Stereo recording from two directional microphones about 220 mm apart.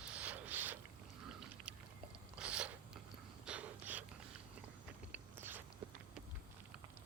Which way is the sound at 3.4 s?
5° right (ahead or behind).